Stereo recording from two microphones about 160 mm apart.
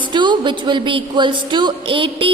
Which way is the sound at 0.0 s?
30° right (ahead or behind).